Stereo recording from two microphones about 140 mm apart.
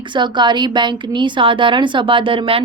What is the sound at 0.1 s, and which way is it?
A woman's voice, 35° right (ahead or behind).